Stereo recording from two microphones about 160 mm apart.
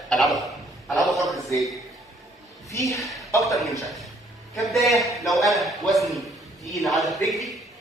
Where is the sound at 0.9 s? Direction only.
Centre (ahead or behind).